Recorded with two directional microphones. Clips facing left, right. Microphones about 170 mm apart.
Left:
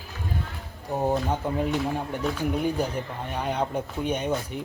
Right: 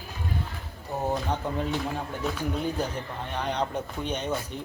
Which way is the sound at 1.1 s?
10° left (ahead or behind).